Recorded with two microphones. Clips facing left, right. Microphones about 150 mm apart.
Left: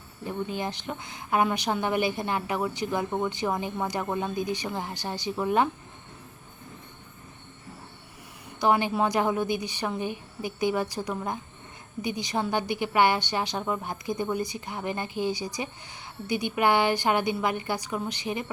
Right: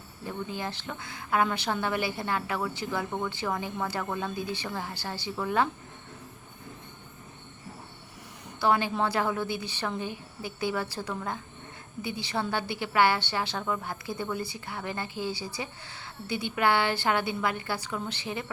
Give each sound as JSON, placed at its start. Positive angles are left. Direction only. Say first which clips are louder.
{"t": 0.3, "sound": "a woman's voice", "louder": "left 3 dB", "side_deg": 20}
{"t": 8.6, "sound": "a woman's voice", "louder": "left 2 dB", "side_deg": 15}